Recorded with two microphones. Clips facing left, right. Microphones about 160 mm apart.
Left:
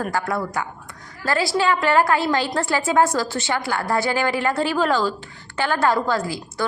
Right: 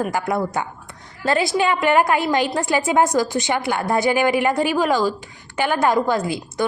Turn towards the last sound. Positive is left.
turn(degrees=-20)  # may be behind; listen again after turning